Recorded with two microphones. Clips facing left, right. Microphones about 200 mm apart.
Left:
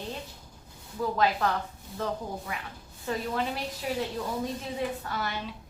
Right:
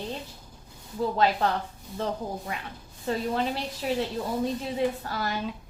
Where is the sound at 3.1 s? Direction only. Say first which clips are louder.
Right 3 dB; 30° right (ahead or behind).